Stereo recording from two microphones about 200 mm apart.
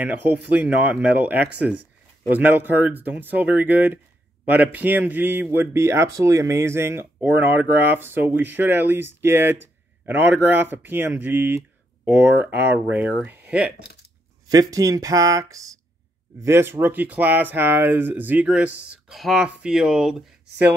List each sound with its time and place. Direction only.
0.0 s speech: 10° right (ahead or behind)